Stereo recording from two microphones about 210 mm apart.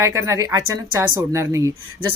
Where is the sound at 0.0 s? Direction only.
15° right (ahead or behind).